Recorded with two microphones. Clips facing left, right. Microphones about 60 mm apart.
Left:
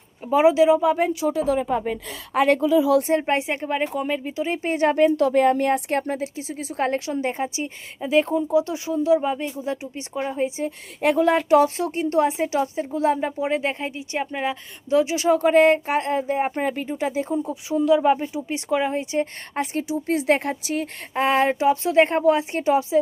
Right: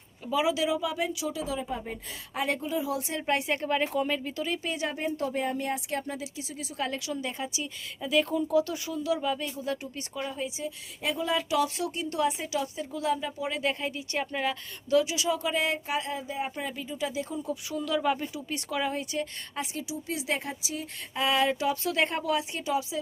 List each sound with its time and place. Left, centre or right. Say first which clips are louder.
0.3 s speech: left 11 dB; left
3.0 s speech: left 8 dB; left; by 4.4 s centre
4.4 s speech: left 12 dB; left
4.9 s speech: left 16 dB; left
9.9 s speech: left 7 dB; left
11.0 s speech: left 10 dB; left
19.5 s speech: left 10 dB; left
21.2 s speech: left 7 dB; left